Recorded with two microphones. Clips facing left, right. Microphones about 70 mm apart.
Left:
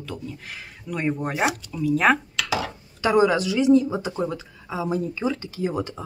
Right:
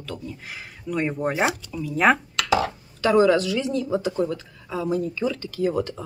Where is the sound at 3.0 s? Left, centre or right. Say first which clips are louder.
Right 1 dB; centre.